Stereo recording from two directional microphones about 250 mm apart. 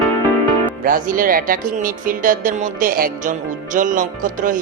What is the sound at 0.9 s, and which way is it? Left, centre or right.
Speech, right.